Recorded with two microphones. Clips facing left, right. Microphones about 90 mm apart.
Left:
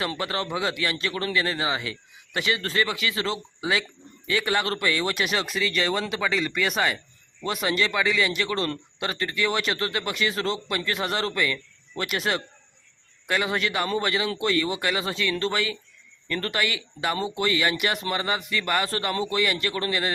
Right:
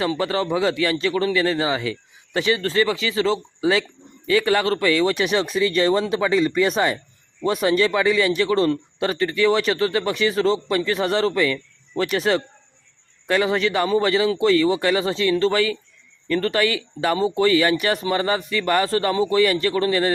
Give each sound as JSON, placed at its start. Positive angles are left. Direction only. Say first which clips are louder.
{"t": 0.2, "sound": "speech", "louder": "right 7 dB", "side_deg": -30}
{"t": 4.6, "sound": "speech", "louder": "right 7 dB", "side_deg": -25}